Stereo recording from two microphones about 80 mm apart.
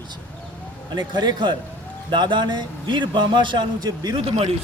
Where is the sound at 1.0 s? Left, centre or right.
Right.